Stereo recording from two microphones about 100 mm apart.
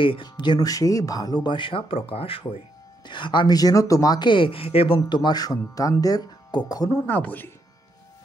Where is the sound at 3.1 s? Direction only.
50° left (ahead or behind).